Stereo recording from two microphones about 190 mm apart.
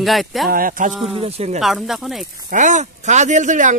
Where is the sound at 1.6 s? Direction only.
Centre (ahead or behind).